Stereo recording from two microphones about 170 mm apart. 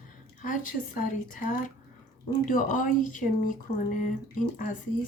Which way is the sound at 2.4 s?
50° left (ahead or behind).